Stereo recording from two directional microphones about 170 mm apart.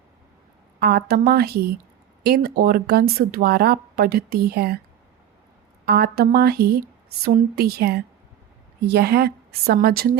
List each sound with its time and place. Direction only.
0.8 s speech: 70° right (ahead or behind)
5.8 s speech: 70° right (ahead or behind)